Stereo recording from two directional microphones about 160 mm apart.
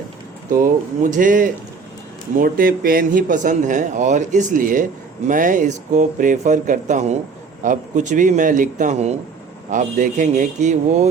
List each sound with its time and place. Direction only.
1.1 s a man's voice: 55° right (ahead or behind)